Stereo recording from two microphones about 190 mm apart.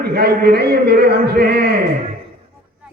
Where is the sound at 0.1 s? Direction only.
55° right (ahead or behind).